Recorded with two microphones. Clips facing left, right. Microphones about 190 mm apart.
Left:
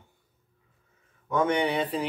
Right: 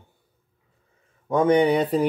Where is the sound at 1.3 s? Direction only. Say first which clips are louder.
Right 7 dB; 35° right (ahead or behind).